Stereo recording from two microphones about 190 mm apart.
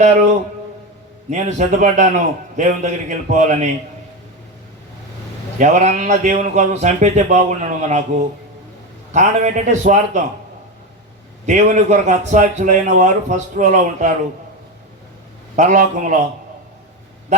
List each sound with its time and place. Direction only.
1.3 s a man's voice: 40° right (ahead or behind)
5.5 s a man's voice: 40° right (ahead or behind)
11.4 s a man's voice: 40° right (ahead or behind)
15.5 s a man's voice: 45° right (ahead or behind)